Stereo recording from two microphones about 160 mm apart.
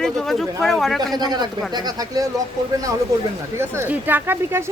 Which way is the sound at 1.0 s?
25° right (ahead or behind).